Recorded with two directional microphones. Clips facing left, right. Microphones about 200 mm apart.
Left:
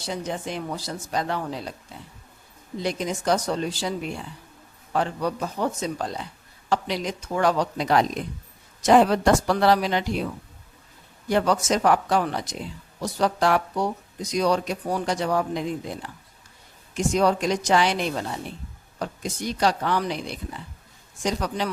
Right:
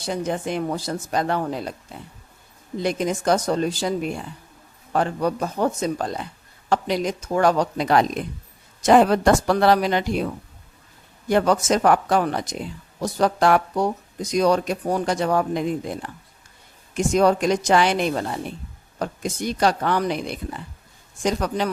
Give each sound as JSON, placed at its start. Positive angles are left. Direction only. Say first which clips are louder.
{"t": 0.0, "sound": "speech", "louder": "right 4 dB", "side_deg": -55}
{"t": 2.8, "sound": "speech", "louder": "right 4 dB", "side_deg": -55}
{"t": 11.3, "sound": "speech", "louder": "right 3 dB", "side_deg": -50}
{"t": 16.9, "sound": "speech", "louder": "right 3 dB", "side_deg": -50}